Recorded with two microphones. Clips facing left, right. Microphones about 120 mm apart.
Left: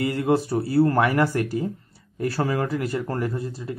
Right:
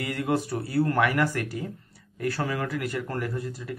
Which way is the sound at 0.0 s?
30° left (ahead or behind).